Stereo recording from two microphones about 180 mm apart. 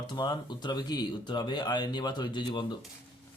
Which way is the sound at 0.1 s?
25° left (ahead or behind).